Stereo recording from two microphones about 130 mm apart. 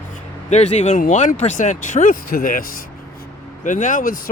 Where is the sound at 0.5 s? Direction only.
60° left (ahead or behind); by 2.6 s 90° left.